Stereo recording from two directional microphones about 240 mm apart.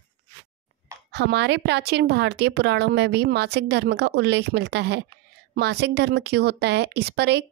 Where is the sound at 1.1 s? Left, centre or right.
Right.